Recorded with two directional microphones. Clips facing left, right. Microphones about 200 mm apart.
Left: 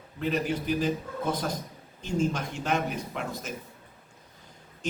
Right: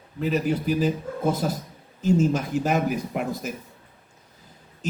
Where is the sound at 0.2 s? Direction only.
5° right (ahead or behind).